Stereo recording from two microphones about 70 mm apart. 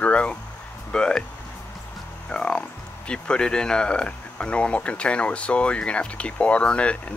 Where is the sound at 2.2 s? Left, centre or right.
Centre.